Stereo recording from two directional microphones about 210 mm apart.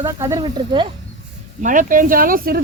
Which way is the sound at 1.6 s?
40° right (ahead or behind).